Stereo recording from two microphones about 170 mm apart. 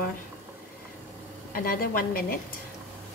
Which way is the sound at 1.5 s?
60° left (ahead or behind).